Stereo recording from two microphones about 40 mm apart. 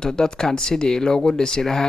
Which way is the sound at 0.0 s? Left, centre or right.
Centre.